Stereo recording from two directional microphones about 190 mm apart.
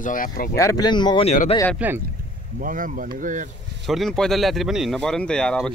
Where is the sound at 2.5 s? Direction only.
45° right (ahead or behind).